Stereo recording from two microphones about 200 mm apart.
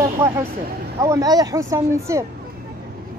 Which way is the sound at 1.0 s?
15° right (ahead or behind).